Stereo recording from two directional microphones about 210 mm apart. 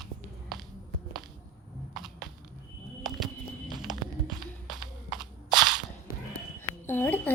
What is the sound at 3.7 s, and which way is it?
Music, 20° right (ahead or behind).